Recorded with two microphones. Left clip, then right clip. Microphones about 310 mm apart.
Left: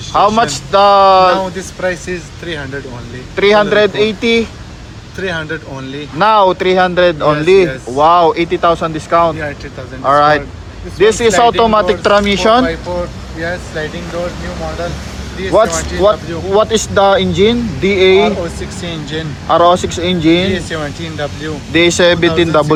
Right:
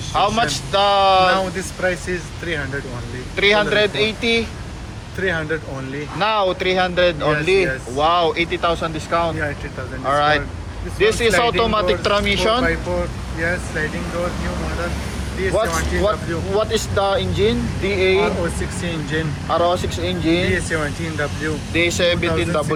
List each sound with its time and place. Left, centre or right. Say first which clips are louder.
0.1 s speech: left 7 dB; left
3.3 s speech: left 6 dB; left
6.1 s speech: left 9 dB; left
15.5 s speech: left 10 dB; left